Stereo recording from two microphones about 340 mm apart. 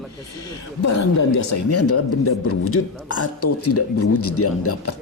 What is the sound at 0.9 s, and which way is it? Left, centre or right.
Speech, left.